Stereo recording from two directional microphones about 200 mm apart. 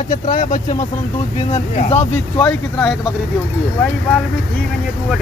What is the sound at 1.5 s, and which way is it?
Speech, 35° left (ahead or behind).